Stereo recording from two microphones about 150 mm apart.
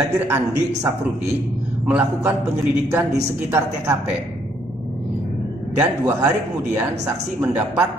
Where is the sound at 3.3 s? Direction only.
15° right (ahead or behind).